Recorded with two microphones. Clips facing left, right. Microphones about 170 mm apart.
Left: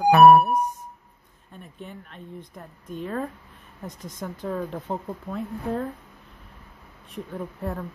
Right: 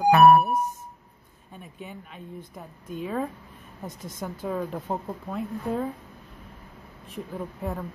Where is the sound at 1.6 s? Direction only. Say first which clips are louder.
Even; 5° right (ahead or behind).